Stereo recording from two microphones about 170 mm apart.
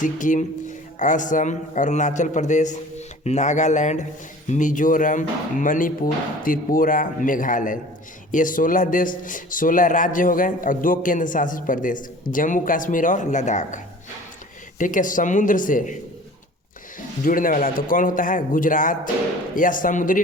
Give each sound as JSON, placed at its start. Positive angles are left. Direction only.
{"t": 0.0, "sound": "a man's voice", "side_deg": 50}
{"t": 17.2, "sound": "a man's voice", "side_deg": 55}